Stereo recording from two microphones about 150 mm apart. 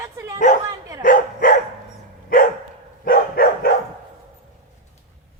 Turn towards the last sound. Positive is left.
turn(degrees=80)